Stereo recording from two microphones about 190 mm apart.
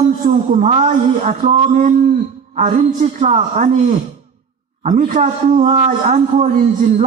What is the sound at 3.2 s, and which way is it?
A man's voice, 40° right (ahead or behind).